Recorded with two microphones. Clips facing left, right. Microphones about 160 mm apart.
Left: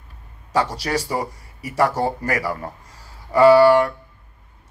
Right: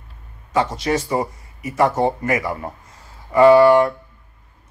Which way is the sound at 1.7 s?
25° right (ahead or behind).